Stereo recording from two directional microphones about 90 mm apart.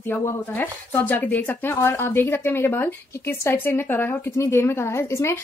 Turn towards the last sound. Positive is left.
turn(degrees=30)  # may be behind; listen again after turning